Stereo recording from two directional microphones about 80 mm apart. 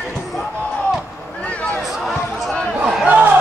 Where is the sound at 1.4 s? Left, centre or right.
Centre.